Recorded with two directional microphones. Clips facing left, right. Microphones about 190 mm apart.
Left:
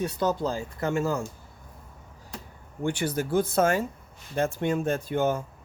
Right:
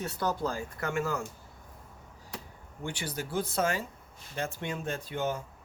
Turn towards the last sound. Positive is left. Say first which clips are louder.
# left 7 dB
turn(degrees=50)  # may be behind; listen again after turning